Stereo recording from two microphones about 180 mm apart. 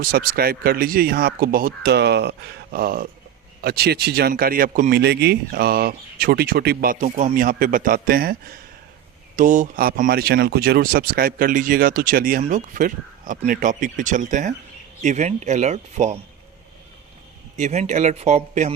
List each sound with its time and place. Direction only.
0.0 s speech: 55° right (ahead or behind)
2.7 s speech: 55° right (ahead or behind)
9.3 s speech: 45° right (ahead or behind)
17.6 s speech: 40° right (ahead or behind)